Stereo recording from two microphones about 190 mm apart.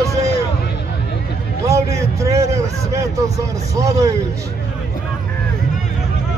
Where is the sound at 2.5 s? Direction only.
15° right (ahead or behind).